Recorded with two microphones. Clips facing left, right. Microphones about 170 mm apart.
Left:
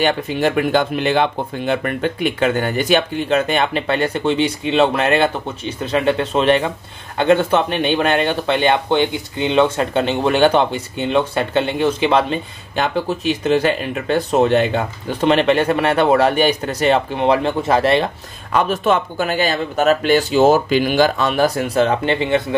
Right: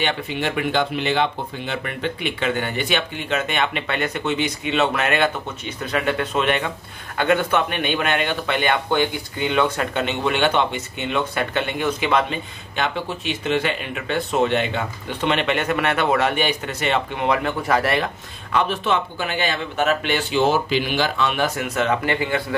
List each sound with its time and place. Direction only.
0.0 s speech: 40° left (ahead or behind)
18.5 s speech: 45° left (ahead or behind); by 22.6 s 25° left (ahead or behind)